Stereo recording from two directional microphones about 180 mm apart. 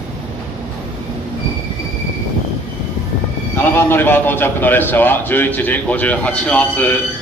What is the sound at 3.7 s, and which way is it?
A man's voice, 10° left (ahead or behind).